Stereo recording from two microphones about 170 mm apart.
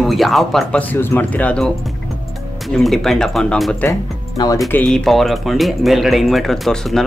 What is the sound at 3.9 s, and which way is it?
Speech, 20° left (ahead or behind).